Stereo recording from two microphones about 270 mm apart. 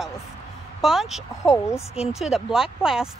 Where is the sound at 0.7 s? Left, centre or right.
Centre.